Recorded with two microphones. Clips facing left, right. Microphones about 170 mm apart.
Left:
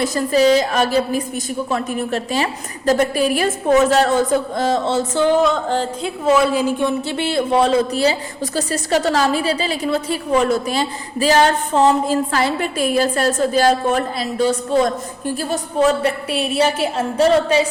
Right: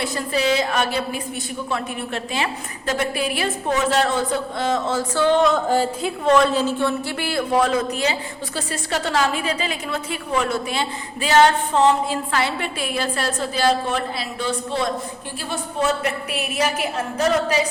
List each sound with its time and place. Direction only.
0.0 s a woman's voice: 40° left (ahead or behind); by 5.3 s 25° left (ahead or behind)
5.3 s a woman's voice: centre (ahead or behind); by 17.7 s 30° left (ahead or behind)